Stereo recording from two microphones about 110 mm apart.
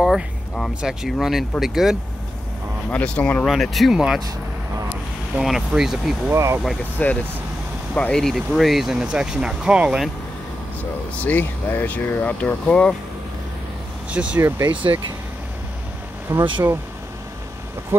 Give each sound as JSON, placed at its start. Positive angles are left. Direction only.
{"t": 0.0, "sound": "speech", "side_deg": 0}
{"t": 2.9, "sound": "speech", "side_deg": 10}
{"t": 3.4, "sound": "speech", "side_deg": 0}
{"t": 5.4, "sound": "speech", "side_deg": -5}
{"t": 6.3, "sound": "speech", "side_deg": -25}
{"t": 7.0, "sound": "speech", "side_deg": 15}
{"t": 11.1, "sound": "speech", "side_deg": 15}
{"t": 14.1, "sound": "speech", "side_deg": -10}
{"t": 14.7, "sound": "speech", "side_deg": -50}
{"t": 16.3, "sound": "speech", "side_deg": -20}